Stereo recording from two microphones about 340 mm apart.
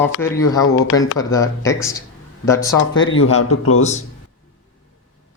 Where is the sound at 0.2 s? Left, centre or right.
Centre.